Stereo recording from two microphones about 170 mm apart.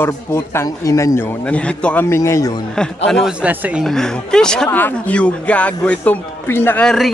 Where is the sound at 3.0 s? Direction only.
5° left (ahead or behind).